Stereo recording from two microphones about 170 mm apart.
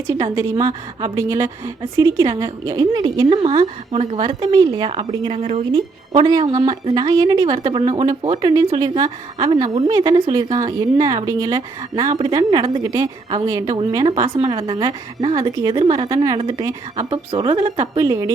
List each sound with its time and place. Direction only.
0.1 s a woman's voice: 20° right (ahead or behind)
5.4 s speech: 40° right (ahead or behind)
5.7 s a woman's voice: 25° right (ahead or behind)
14.3 s a woman's voice: 30° right (ahead or behind)
18.0 s a woman's voice: 20° right (ahead or behind)